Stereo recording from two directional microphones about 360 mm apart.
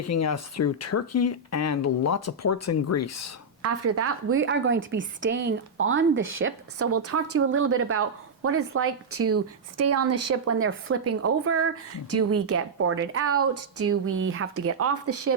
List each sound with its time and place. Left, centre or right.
0.0 s speech: left
3.6 s a woman's voice: right